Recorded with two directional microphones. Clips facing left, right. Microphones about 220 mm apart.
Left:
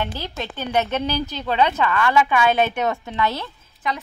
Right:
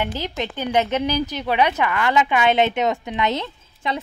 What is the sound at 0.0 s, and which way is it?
A woman's voice, 15° right (ahead or behind).